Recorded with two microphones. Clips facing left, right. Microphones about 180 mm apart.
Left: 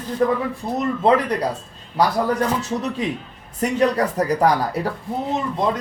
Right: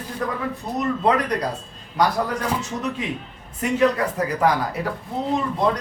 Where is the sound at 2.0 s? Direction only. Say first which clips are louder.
Left 1 dB; 30° left (ahead or behind).